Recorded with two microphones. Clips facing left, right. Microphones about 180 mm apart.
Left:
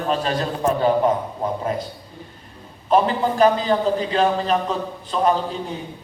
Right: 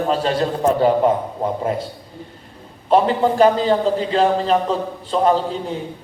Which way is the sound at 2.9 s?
30° right (ahead or behind).